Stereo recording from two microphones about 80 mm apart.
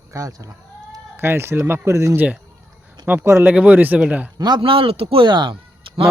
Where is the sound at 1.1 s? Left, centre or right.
Right.